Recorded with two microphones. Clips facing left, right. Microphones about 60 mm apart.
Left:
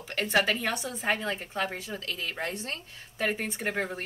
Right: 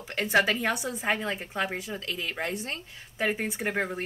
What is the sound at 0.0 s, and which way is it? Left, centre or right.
A woman's voice, centre.